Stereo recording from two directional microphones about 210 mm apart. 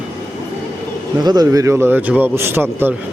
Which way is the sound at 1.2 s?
20° right (ahead or behind).